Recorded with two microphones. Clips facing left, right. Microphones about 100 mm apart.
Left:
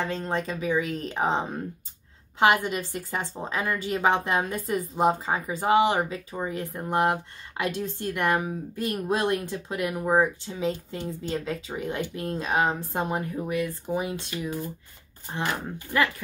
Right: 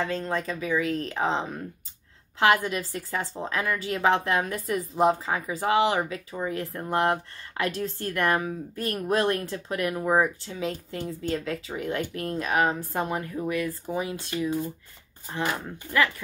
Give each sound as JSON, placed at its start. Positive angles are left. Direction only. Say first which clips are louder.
{"t": 0.0, "sound": "a woman's voice", "louder": "even", "side_deg": 25}
{"t": 2.4, "sound": "a woman's voice", "louder": "even", "side_deg": 20}